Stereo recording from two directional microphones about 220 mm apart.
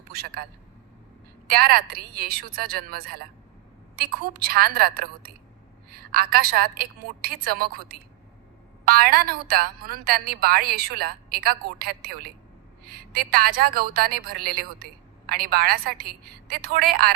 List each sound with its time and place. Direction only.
0.1 s a man's voice: 45° right (ahead or behind)
1.5 s a woman's voice: 45° right (ahead or behind)